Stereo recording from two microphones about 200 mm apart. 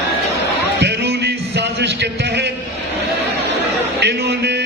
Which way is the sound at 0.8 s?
55° right (ahead or behind).